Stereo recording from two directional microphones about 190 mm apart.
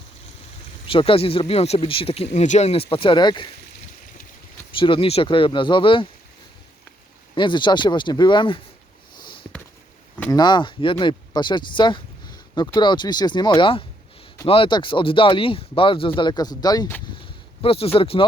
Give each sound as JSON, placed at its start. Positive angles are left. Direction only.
{"t": 0.9, "sound": "speech", "side_deg": 30}
{"t": 4.8, "sound": "speech", "side_deg": 25}
{"t": 7.3, "sound": "speech", "side_deg": 25}
{"t": 10.2, "sound": "speech", "side_deg": 20}
{"t": 17.6, "sound": "speech", "side_deg": 30}